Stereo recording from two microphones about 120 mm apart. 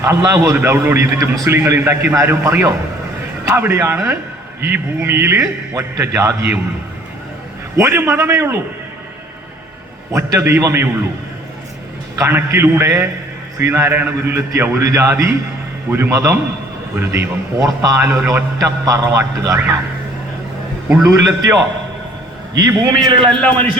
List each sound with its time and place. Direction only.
0.0 s a man's voice: 25° right (ahead or behind)
7.8 s a man's voice: 20° right (ahead or behind)
10.1 s a man's voice: 20° right (ahead or behind)
12.1 s a man's voice: 25° right (ahead or behind)
21.0 s a man's voice: 25° right (ahead or behind)
23.0 s a man's voice: 45° right (ahead or behind)